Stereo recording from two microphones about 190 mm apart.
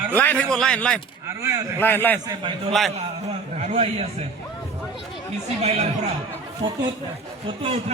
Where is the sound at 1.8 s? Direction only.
10° left (ahead or behind).